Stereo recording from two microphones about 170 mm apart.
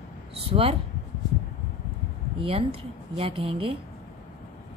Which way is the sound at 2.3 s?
35° right (ahead or behind).